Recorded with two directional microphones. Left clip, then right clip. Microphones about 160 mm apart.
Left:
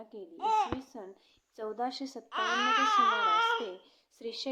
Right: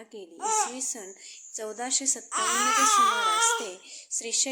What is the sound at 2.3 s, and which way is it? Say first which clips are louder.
Baby cry: right 2 dB; 45° right (ahead or behind).